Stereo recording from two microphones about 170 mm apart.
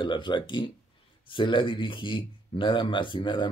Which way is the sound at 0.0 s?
30° left (ahead or behind).